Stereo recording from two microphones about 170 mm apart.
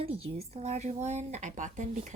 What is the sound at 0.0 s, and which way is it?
A woman's voice, 35° right (ahead or behind).